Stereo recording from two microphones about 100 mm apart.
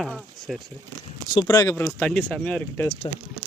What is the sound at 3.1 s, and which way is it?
Speech, 55° left (ahead or behind).